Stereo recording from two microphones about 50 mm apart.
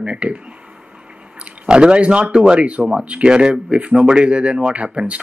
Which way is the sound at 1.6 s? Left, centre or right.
Centre.